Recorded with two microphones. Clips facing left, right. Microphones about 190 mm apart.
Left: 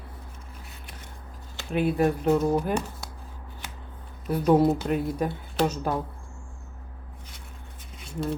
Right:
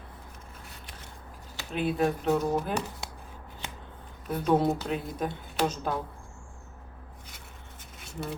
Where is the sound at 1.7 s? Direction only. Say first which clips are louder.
Left 4 dB; 10° left (ahead or behind).